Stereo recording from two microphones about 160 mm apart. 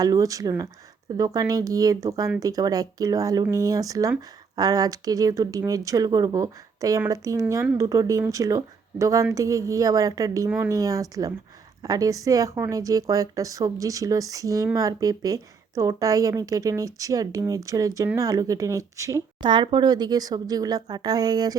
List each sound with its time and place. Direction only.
0.0 s speech: 20° right (ahead or behind)